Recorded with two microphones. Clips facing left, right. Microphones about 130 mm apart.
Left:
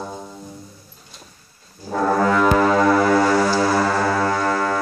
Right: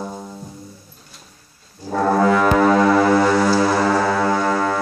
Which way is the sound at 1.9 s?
5° right (ahead or behind).